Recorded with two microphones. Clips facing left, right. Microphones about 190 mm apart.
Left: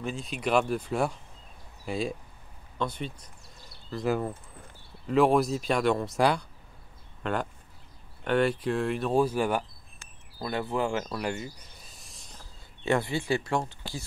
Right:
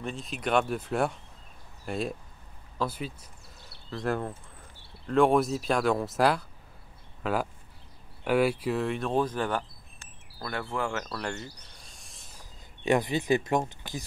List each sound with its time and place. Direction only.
0.0 s speech: centre (ahead or behind)
12.8 s speech: 15° right (ahead or behind)